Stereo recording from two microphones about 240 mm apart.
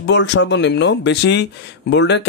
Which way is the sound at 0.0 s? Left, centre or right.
Left.